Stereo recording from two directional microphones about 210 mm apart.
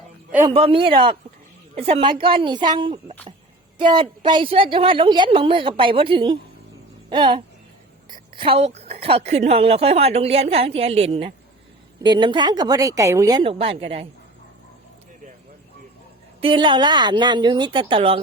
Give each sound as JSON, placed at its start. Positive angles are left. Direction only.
{"t": 0.3, "sound": "a man's voice", "side_deg": -10}
{"t": 0.5, "sound": "a woman's voice", "side_deg": -25}
{"t": 16.4, "sound": "a woman's voice", "side_deg": -25}